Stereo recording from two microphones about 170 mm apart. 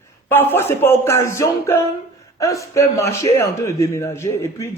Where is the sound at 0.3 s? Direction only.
15° left (ahead or behind).